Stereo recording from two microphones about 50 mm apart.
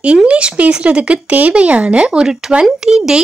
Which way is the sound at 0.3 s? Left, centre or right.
Right.